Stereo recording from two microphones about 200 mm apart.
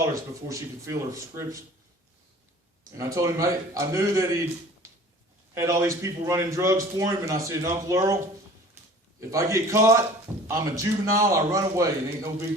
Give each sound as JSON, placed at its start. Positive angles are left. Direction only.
{"t": 0.0, "sound": "a man's voice", "side_deg": -15}
{"t": 3.0, "sound": "a man's voice", "side_deg": -15}
{"t": 5.5, "sound": "a man's voice", "side_deg": -15}
{"t": 9.3, "sound": "a man's voice", "side_deg": -15}